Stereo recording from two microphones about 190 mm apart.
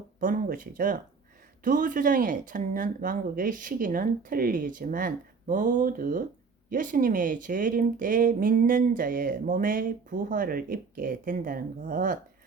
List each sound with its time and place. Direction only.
0.2 s speech: 45° right (ahead or behind)